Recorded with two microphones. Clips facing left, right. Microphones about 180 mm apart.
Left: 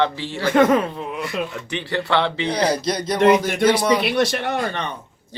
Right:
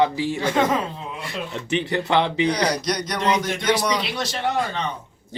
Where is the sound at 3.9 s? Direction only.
65° left (ahead or behind).